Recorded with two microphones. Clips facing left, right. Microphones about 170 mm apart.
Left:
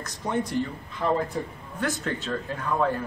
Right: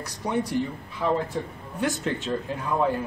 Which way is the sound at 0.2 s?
15° right (ahead or behind).